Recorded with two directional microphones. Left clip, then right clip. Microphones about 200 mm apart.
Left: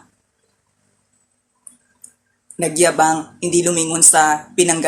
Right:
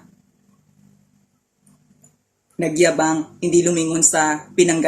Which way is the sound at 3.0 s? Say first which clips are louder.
Left 4 dB; 15° right (ahead or behind).